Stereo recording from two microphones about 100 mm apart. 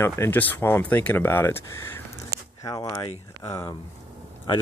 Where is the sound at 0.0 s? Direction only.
25° left (ahead or behind).